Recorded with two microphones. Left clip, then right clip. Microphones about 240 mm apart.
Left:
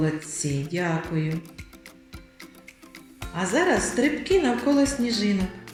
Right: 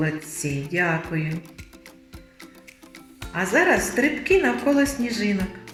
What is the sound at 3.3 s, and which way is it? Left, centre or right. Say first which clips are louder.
A woman's voice: right 3 dB; right.